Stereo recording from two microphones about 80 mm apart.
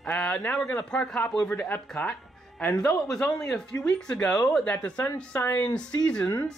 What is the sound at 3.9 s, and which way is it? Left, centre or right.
Speech, centre.